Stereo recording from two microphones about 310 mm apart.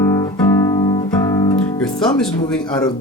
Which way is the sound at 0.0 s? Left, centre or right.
Centre.